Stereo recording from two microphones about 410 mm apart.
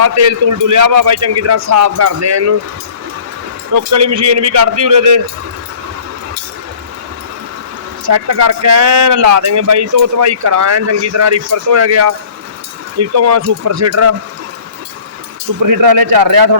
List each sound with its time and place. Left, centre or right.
0.0 s speech: right
3.7 s a man's voice: right
8.0 s speech: right
15.6 s a man's voice: right